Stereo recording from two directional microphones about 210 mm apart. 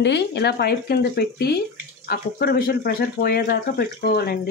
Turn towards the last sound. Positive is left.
turn(degrees=45)  # may be behind; listen again after turning